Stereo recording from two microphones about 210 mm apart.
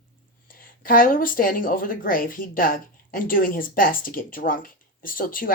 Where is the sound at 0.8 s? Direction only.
40° left (ahead or behind).